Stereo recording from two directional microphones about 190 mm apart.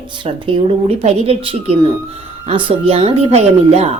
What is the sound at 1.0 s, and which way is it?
A woman's voice, 30° right (ahead or behind).